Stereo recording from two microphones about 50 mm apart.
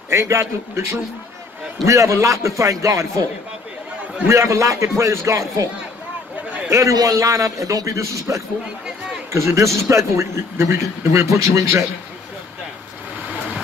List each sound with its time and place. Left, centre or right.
0.1 s speech: right
1.9 s a man's voice: right
4.3 s a man's voice: right
6.7 s a man's voice: right
9.3 s speech: right
9.8 s speech: right